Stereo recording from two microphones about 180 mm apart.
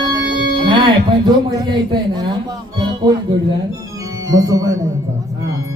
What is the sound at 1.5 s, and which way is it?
Speech, 25° right (ahead or behind).